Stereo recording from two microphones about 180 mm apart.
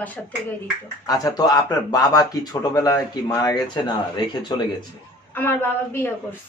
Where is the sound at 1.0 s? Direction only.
20° left (ahead or behind).